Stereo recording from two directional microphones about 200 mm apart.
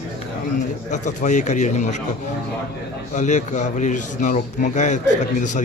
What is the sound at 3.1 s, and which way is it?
A man's voice, 35° left (ahead or behind).